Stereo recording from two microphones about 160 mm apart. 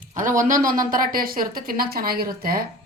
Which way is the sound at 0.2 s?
55° right (ahead or behind).